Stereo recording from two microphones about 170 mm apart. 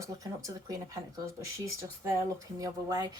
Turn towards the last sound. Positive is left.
turn(degrees=-25)  # may be behind; listen again after turning